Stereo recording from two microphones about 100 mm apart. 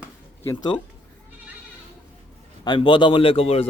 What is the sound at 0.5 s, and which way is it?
Speech, 50° left (ahead or behind).